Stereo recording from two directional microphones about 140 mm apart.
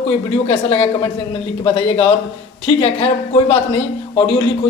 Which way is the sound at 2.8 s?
45° left (ahead or behind).